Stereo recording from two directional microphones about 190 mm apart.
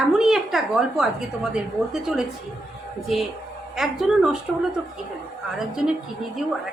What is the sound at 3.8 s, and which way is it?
Speech, centre (ahead or behind).